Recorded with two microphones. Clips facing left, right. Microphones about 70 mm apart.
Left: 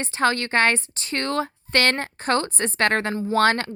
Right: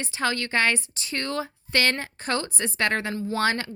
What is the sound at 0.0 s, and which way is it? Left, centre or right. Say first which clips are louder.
Speech: left 5 dB; left.